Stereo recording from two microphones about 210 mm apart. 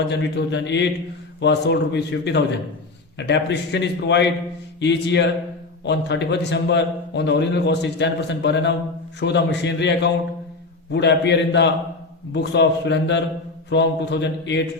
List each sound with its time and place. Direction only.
0.1 s a man's voice: 55° left (ahead or behind)